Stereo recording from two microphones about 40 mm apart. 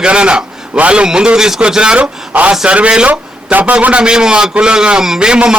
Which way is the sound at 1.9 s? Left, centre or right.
Right.